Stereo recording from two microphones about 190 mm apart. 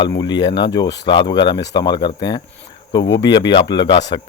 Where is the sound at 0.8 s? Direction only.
65° left (ahead or behind).